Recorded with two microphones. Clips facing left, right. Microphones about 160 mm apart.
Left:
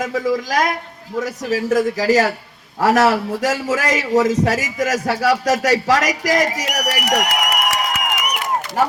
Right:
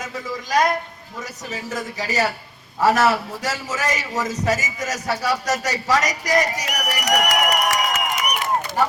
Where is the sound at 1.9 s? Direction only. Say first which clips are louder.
Left 8 dB; 90° left.